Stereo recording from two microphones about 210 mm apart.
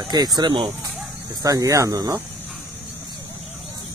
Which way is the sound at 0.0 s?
20° right (ahead or behind).